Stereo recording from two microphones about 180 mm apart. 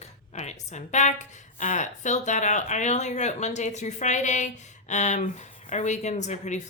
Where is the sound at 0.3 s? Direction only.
40° left (ahead or behind).